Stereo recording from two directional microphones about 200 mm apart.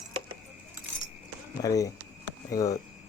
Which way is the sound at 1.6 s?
15° left (ahead or behind).